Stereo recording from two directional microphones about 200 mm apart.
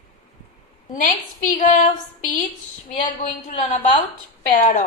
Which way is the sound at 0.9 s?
40° left (ahead or behind).